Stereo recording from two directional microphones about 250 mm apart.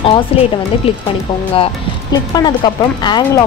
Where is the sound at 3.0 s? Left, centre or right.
Centre.